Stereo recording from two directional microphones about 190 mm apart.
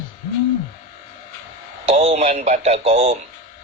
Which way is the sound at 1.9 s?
35° right (ahead or behind).